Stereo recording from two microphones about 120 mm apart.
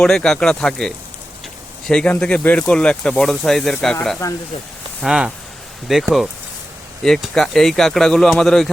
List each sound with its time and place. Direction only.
0.0 s speech: 5° left (ahead or behind)
4.2 s speech: 30° left (ahead or behind)
4.9 s speech: 5° right (ahead or behind)